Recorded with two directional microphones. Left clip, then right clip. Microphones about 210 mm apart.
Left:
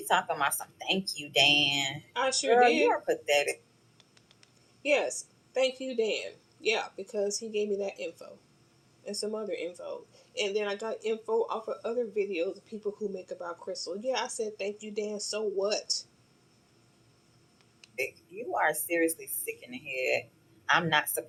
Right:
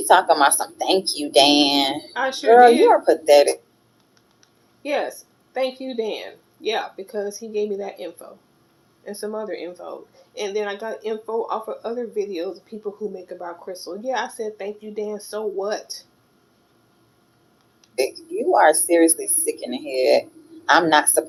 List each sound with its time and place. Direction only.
0.1 s speech: 40° right (ahead or behind)
2.1 s speech: 35° left (ahead or behind)
2.5 s speech: 35° right (ahead or behind)
4.8 s speech: 35° left (ahead or behind)
9.2 s speech: 30° left (ahead or behind)
17.9 s speech: 40° right (ahead or behind)